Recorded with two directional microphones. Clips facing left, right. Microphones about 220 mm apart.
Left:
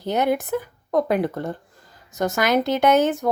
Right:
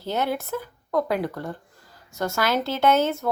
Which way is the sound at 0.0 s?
15° left (ahead or behind).